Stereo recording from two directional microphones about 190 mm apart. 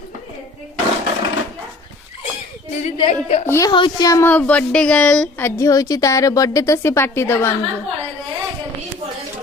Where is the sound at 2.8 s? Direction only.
35° left (ahead or behind).